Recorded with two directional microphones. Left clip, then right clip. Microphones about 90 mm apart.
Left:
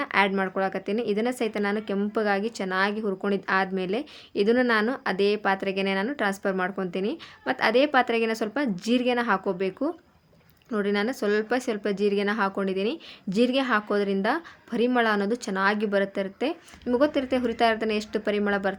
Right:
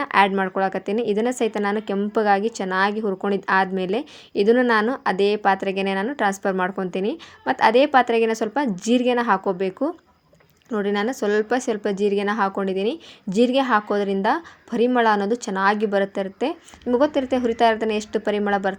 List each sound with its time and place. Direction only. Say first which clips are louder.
0.0 s a woman's voice: right 5 dB; 40° right (ahead or behind)